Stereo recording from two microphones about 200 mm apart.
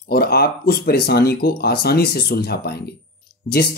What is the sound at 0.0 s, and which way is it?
Speech, 50° left (ahead or behind).